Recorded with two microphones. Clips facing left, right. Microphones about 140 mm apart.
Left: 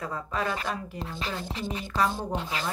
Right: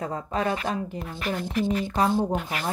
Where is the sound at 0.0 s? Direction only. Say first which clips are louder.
Right 4 dB; 35° right (ahead or behind).